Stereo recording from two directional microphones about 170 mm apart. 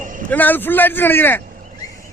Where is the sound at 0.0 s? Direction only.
50° right (ahead or behind).